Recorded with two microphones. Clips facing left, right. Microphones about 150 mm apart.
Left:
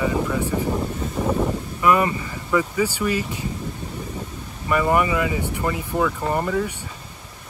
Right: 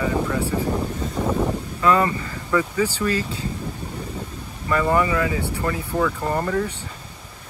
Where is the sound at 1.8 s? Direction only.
15° left (ahead or behind).